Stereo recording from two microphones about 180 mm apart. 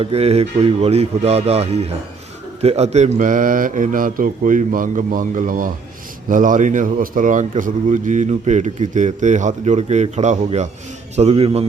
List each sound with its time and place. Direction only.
0.0 s speech: 35° right (ahead or behind)
2.6 s mantra: 35° right (ahead or behind)
6.2 s speech: 45° right (ahead or behind)